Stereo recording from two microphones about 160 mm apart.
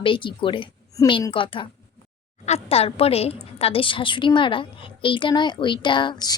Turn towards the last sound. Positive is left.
turn(degrees=25)  # may be behind; listen again after turning